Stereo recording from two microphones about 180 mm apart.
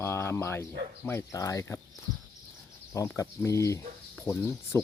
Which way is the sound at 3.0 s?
15° left (ahead or behind).